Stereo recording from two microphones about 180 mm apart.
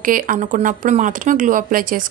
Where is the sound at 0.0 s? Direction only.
50° right (ahead or behind).